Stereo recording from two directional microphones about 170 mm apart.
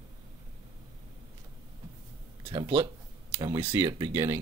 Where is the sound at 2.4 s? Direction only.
30° right (ahead or behind).